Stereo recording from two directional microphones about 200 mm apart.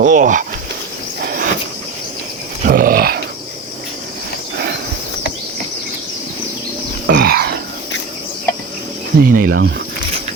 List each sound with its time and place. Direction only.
0.0 s speech: 40° right (ahead or behind)
1.2 s insect: 50° right (ahead or behind)
2.6 s grunt: 45° right (ahead or behind)
4.5 s horse: 55° right (ahead or behind)
7.1 s a sound: 50° right (ahead or behind)
9.1 s speech: 45° right (ahead or behind)
9.6 s speech: 65° right (ahead or behind)